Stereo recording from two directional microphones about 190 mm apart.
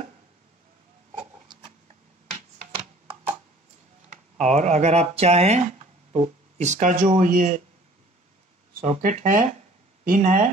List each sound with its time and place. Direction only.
2.3 s a sound: 40° right (ahead or behind)
4.4 s speech: 35° right (ahead or behind)
8.8 s speech: 45° right (ahead or behind)